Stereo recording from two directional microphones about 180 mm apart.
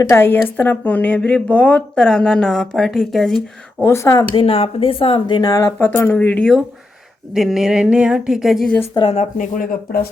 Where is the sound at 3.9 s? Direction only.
20° left (ahead or behind).